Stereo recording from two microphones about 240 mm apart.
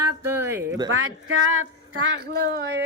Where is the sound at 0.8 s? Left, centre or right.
Right.